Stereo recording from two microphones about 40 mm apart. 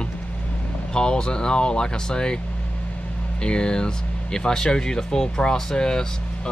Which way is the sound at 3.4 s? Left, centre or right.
Left.